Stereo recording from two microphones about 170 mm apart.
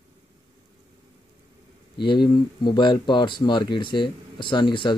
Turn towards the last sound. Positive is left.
turn(degrees=25)  # may be behind; listen again after turning